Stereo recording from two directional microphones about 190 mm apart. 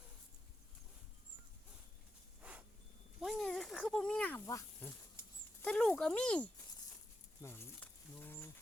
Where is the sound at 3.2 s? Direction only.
Centre (ahead or behind).